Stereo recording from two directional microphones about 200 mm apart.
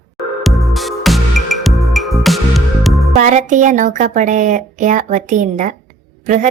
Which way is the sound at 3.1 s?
40° right (ahead or behind).